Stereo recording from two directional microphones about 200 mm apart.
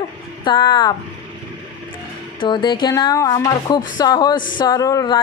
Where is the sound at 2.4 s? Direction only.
25° left (ahead or behind).